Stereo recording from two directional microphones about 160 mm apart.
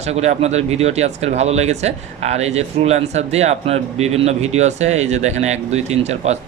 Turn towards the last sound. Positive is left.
turn(degrees=-45)  # may be behind; listen again after turning